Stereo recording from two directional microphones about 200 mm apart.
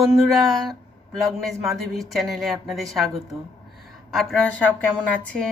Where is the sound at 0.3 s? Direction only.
Centre (ahead or behind).